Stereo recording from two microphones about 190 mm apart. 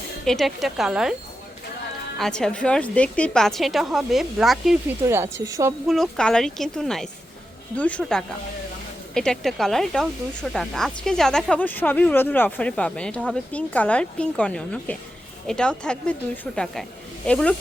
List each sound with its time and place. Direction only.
0.3 s speech: centre (ahead or behind)
2.1 s speech: centre (ahead or behind)
5.0 s a woman's voice: 15° right (ahead or behind)
5.9 s speech: centre (ahead or behind)